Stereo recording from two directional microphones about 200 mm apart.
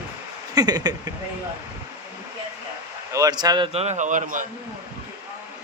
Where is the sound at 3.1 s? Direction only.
20° right (ahead or behind); by 4.4 s 40° right (ahead or behind).